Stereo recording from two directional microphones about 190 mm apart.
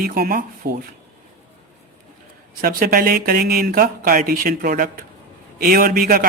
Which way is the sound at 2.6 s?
50° right (ahead or behind).